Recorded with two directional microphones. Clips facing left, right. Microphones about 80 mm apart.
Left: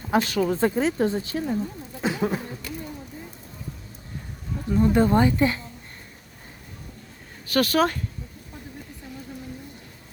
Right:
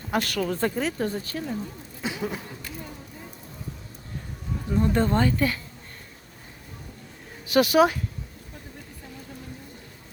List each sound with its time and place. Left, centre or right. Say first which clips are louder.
0.1 s speech: left 4 dB; centre
2.0 s a sound: left 5 dB; left
4.7 s speech: left 4 dB; centre
7.4 s speech: right 2 dB; centre